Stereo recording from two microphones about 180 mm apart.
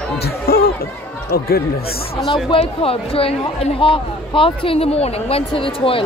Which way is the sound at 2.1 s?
30° left (ahead or behind).